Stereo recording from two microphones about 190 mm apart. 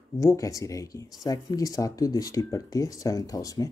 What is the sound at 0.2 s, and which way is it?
Speech, 15° left (ahead or behind).